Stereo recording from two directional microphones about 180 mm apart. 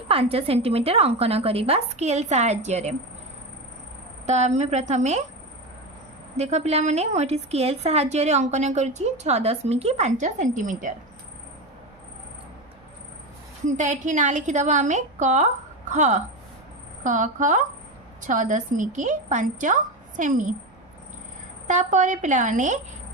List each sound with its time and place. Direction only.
0.1 s a woman's voice: 35° right (ahead or behind)
4.3 s a woman's voice: 40° right (ahead or behind)
6.3 s a woman's voice: 35° right (ahead or behind)
13.7 s a woman's voice: 45° right (ahead or behind)
21.7 s a woman's voice: 45° right (ahead or behind)